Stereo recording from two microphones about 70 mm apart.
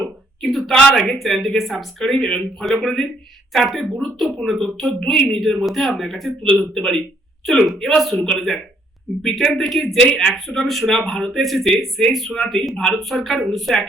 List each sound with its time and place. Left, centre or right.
0.4 s speech: centre